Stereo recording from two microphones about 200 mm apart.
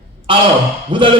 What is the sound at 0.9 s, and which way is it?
Music, 25° right (ahead or behind).